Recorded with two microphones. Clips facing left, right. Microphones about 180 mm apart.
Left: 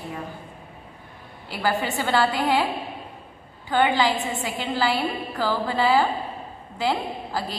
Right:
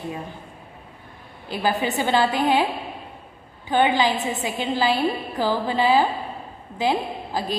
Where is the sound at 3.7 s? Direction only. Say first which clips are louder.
Right 1 dB; 20° right (ahead or behind).